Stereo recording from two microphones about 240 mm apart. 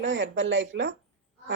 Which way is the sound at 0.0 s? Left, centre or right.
Right.